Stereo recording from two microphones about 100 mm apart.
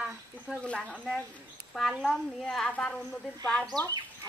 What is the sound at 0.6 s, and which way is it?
Speech, 10° left (ahead or behind).